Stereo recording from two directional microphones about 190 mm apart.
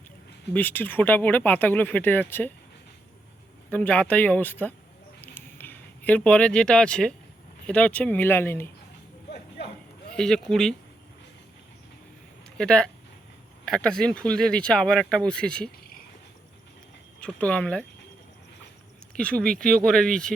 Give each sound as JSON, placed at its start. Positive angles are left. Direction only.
{"t": 0.5, "sound": "speech", "side_deg": 10}
{"t": 3.7, "sound": "speech", "side_deg": 5}
{"t": 5.2, "sound": "a sound", "side_deg": 10}
{"t": 7.7, "sound": "speech", "side_deg": 5}
{"t": 10.1, "sound": "speech", "side_deg": 5}
{"t": 12.5, "sound": "speech", "side_deg": 5}
{"t": 17.2, "sound": "speech", "side_deg": 5}
{"t": 19.1, "sound": "speech", "side_deg": 5}